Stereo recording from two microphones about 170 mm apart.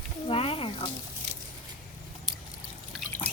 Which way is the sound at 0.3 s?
30° left (ahead or behind).